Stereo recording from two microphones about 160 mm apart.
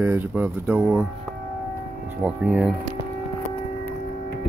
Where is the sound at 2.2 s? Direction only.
10° right (ahead or behind).